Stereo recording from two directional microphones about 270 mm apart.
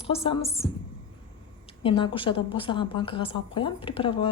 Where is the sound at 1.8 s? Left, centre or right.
Centre.